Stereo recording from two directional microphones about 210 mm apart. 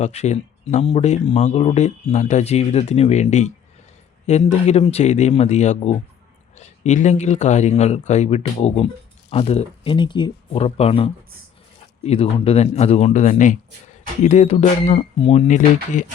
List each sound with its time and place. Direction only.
0.0 s speech: 30° left (ahead or behind)